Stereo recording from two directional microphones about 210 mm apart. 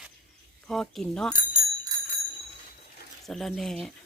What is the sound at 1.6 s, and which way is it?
Clock, 30° right (ahead or behind).